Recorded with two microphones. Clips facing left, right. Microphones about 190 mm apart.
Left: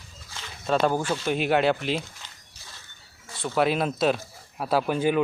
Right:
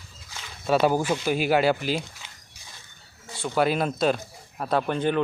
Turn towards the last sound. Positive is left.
turn(degrees=5)  # may be behind; listen again after turning